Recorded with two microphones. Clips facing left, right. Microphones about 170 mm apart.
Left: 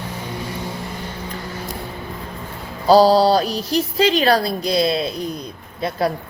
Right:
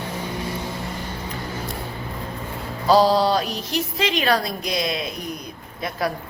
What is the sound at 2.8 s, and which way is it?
A woman's voice, 35° left (ahead or behind).